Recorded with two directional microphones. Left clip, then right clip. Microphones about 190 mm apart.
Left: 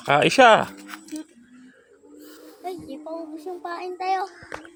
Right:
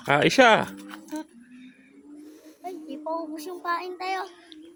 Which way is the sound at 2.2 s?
10° right (ahead or behind).